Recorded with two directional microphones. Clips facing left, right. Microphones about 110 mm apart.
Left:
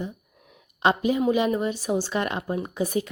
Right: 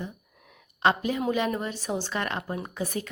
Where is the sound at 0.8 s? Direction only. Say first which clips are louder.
Left 3 dB; 15° left (ahead or behind).